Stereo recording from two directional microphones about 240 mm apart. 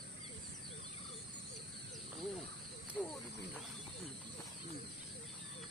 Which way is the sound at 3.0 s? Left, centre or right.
Centre.